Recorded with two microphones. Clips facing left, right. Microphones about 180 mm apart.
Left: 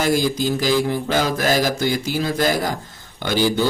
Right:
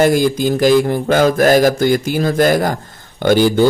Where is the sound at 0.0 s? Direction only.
55° right (ahead or behind).